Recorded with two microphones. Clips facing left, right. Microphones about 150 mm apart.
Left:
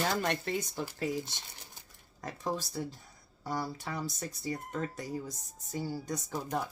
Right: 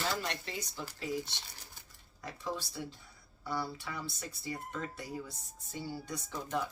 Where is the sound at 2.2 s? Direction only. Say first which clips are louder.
Left 4 dB; 45° left (ahead or behind).